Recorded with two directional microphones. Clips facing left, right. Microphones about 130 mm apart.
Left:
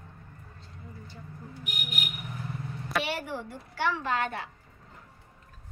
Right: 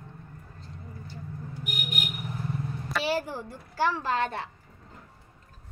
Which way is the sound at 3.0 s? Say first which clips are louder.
Right 4 dB; 35° right (ahead or behind).